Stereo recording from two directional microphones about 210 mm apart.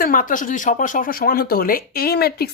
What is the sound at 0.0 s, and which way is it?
Speech, 40° left (ahead or behind).